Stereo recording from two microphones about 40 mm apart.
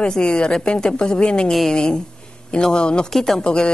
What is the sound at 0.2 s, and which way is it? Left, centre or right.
A woman's voice, left.